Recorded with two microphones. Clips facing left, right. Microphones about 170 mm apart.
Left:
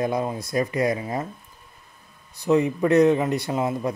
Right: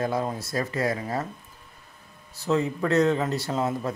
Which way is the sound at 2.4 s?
15° left (ahead or behind).